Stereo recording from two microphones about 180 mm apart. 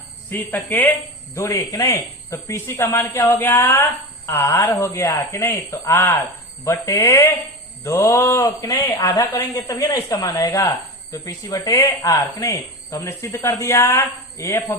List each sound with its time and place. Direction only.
0.3 s speech: 10° left (ahead or behind)